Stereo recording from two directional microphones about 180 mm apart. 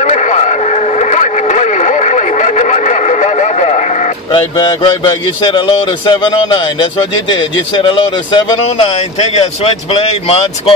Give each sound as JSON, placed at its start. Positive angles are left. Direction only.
{"t": 0.0, "sound": "radio", "side_deg": 40}
{"t": 4.3, "sound": "a man's voice", "side_deg": 25}